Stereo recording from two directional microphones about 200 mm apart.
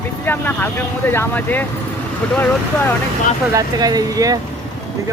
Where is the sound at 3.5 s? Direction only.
20° right (ahead or behind).